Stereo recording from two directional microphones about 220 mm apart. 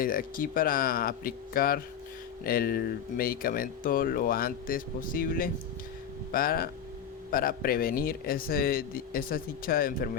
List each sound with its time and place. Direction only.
0.0 s speech: 40° left (ahead or behind)